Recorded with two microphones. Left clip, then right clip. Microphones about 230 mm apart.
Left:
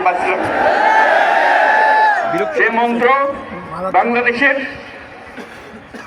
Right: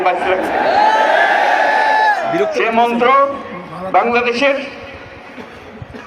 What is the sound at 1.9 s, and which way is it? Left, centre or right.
Crowd, right.